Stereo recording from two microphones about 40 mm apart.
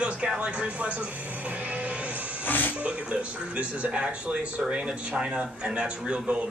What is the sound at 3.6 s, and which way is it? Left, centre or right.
Speech, right.